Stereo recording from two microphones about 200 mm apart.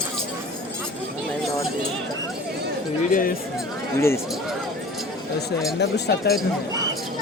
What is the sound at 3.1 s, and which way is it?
Speech, 45° left (ahead or behind).